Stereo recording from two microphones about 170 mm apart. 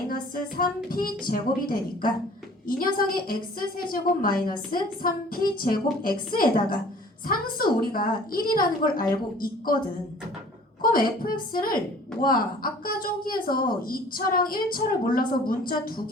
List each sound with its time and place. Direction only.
0.1 s a woman's voice: 60° left (ahead or behind)
10.8 s a woman's voice: 60° left (ahead or behind)